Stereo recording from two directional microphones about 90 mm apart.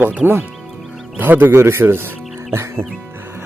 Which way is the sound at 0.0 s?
15° right (ahead or behind).